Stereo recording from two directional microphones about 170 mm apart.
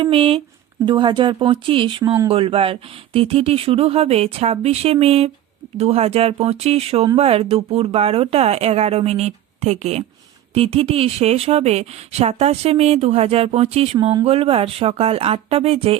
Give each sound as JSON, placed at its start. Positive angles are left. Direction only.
{"t": 0.0, "sound": "speech", "side_deg": -35}